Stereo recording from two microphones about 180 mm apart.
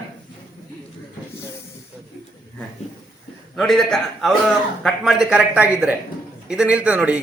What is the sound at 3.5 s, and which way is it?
A man's voice, 5° left (ahead or behind).